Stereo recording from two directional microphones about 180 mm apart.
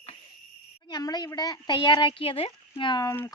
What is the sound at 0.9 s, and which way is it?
Speech, 20° left (ahead or behind).